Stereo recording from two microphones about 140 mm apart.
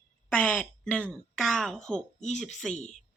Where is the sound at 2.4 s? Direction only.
Centre (ahead or behind).